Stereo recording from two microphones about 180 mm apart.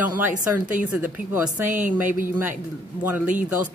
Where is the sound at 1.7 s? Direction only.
45° right (ahead or behind).